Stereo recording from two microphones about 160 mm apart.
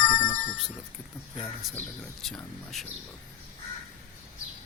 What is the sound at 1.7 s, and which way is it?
Speech, 5° left (ahead or behind).